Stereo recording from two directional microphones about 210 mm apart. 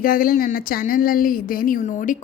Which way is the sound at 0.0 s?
45° left (ahead or behind).